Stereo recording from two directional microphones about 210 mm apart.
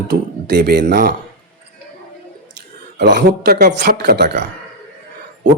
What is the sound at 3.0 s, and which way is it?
A man's voice, 55° right (ahead or behind).